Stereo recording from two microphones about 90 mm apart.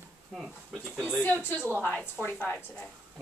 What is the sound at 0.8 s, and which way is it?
Speech, 10° right (ahead or behind).